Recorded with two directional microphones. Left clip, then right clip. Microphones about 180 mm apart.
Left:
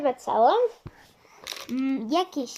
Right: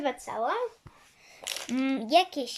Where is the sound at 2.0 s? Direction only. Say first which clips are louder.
Right 5 dB; 5° right (ahead or behind).